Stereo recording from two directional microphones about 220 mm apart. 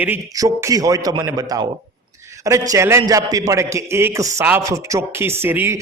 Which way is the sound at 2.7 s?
15° right (ahead or behind).